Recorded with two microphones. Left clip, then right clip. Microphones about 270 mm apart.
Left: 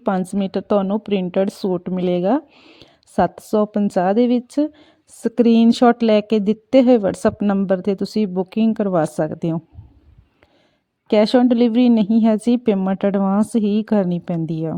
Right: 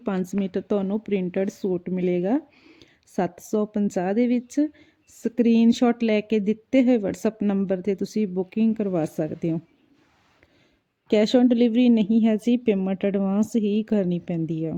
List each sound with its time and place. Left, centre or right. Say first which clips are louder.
0.0 s a woman's voice: left 7 dB; left
11.1 s a woman's voice: left 5 dB; left